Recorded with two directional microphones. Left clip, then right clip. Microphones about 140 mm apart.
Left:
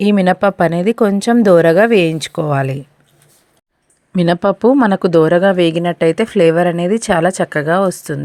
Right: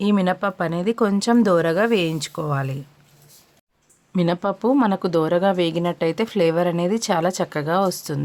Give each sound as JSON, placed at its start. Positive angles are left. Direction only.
{"t": 0.0, "sound": "a woman's voice", "side_deg": 40}
{"t": 4.1, "sound": "speech", "side_deg": 40}